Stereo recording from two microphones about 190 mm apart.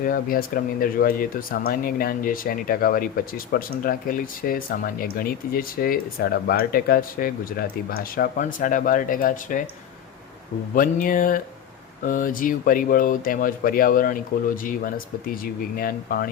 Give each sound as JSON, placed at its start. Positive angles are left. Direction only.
{"t": 0.0, "sound": "speech", "side_deg": 50}
{"t": 10.8, "sound": "speech", "side_deg": 45}